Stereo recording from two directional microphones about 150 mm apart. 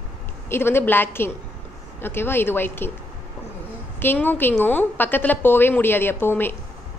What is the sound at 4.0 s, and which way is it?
Speech, 15° left (ahead or behind).